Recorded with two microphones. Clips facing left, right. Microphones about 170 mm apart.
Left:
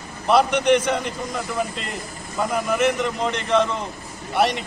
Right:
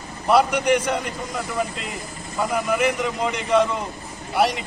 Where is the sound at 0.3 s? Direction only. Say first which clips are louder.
Left 1 dB; 5° right (ahead or behind).